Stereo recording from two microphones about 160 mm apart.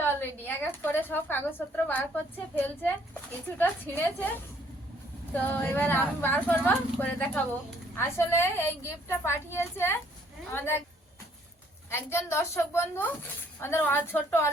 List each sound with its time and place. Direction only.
0.0 s a woman's voice: 10° left (ahead or behind)
11.9 s speech: 15° left (ahead or behind)